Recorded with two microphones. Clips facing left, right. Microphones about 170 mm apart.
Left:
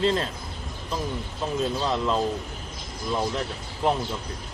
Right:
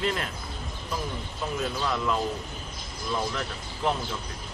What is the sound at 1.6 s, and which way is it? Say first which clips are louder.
Speech: left 4 dB; 25° left (ahead or behind).